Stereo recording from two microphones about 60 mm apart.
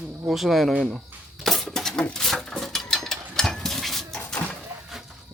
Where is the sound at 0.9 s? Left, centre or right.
Centre.